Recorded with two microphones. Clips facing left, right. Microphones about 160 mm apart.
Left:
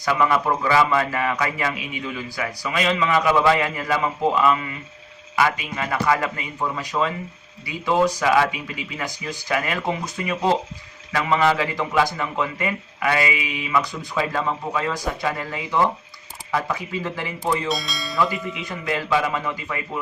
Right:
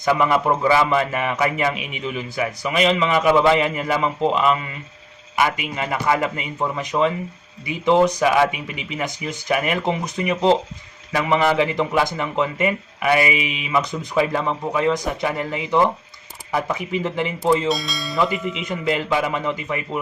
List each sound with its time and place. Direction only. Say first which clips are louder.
0.0 s a man's voice: right 2 dB; 20° right (ahead or behind)
17.7 s speech: right 3 dB; centre (ahead or behind)
18.2 s a man's voice: right 2 dB; 20° right (ahead or behind)